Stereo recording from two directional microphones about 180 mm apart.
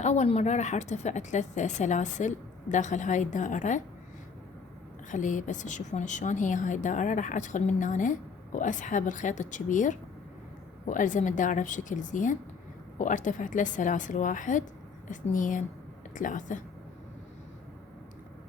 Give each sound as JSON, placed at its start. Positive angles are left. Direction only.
{"t": 0.0, "sound": "speech", "side_deg": 40}
{"t": 5.1, "sound": "a woman's voice", "side_deg": 45}